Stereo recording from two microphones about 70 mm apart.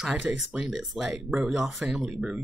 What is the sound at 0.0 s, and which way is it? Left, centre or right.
Speech, centre.